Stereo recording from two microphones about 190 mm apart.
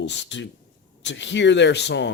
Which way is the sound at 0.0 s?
70° left (ahead or behind).